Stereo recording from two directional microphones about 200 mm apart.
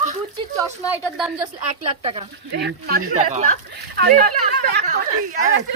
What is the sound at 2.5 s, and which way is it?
Speech, 55° right (ahead or behind).